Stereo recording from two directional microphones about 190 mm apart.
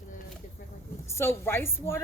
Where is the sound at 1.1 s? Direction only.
15° left (ahead or behind).